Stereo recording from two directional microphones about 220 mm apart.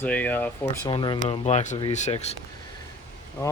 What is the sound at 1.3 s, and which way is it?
Speech, 30° left (ahead or behind).